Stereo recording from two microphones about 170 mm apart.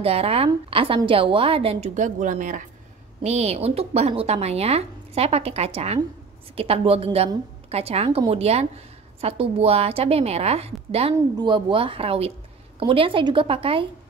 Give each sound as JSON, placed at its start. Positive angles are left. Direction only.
{"t": 0.0, "sound": "speech", "side_deg": -35}
{"t": 3.2, "sound": "speech", "side_deg": -40}